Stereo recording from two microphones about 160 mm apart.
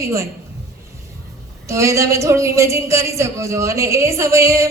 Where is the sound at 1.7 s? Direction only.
20° right (ahead or behind).